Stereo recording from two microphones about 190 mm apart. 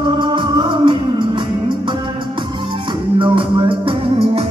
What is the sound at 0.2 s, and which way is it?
Music, 25° right (ahead or behind).